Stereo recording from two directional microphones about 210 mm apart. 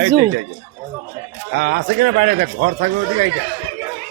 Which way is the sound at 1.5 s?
50° right (ahead or behind).